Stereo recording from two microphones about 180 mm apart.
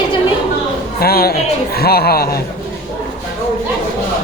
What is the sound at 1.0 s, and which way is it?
Speech, 60° left (ahead or behind).